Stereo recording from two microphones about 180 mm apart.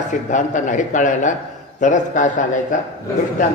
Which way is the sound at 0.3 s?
45° left (ahead or behind).